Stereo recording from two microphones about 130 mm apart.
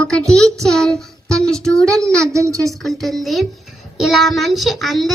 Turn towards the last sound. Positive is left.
turn(degrees=0)  # may be behind; listen again after turning